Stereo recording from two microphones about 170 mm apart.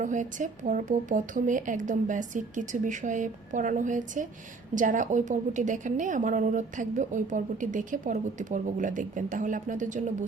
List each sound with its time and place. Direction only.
0.0 s a woman's voice: 50° right (ahead or behind)